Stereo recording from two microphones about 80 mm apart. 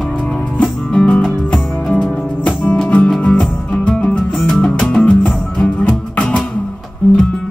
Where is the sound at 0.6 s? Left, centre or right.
Centre.